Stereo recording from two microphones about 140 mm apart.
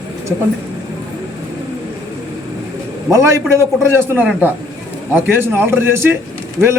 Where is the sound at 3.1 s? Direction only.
20° right (ahead or behind).